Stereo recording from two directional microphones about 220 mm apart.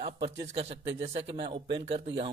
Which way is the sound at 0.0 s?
25° right (ahead or behind).